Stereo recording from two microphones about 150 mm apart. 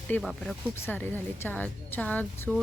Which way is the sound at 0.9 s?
10° left (ahead or behind).